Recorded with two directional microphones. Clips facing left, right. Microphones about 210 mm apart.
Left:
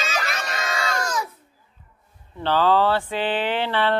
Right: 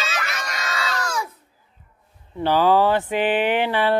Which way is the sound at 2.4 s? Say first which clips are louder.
Right 2 dB; 10° right (ahead or behind).